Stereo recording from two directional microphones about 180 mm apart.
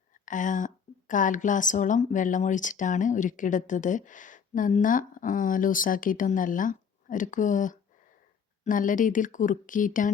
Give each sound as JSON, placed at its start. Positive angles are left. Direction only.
{"t": 0.3, "sound": "speech", "side_deg": 45}